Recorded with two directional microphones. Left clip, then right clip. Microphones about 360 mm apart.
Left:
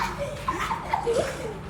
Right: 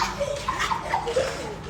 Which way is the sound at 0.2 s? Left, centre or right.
Right.